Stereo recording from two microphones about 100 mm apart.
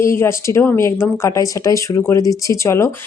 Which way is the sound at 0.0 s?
25° left (ahead or behind).